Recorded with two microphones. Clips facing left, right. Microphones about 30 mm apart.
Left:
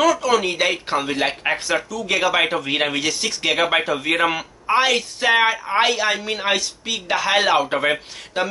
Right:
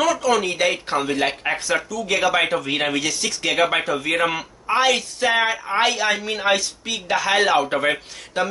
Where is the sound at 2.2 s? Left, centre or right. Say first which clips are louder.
Even; centre.